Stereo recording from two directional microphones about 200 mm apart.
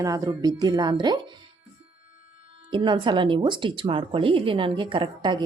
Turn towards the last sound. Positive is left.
turn(degrees=-25)  # may be behind; listen again after turning